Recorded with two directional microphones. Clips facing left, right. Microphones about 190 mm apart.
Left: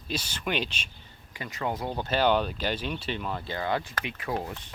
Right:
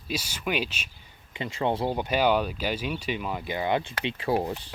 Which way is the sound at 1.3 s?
25° right (ahead or behind).